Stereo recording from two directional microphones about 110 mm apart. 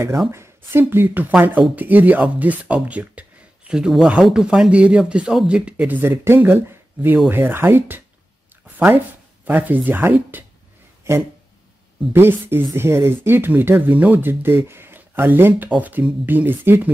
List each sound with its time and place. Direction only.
0.3 s speech: 20° right (ahead or behind)
12.1 s speech: 20° right (ahead or behind)